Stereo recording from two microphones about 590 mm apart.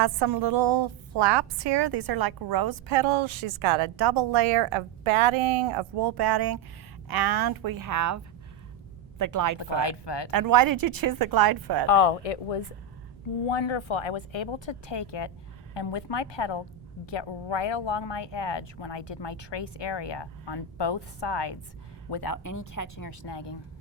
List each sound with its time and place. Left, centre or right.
0.0 s a woman's voice: right
9.6 s speech: left
10.3 s a woman's voice: right
11.9 s speech: left
13.5 s speech: left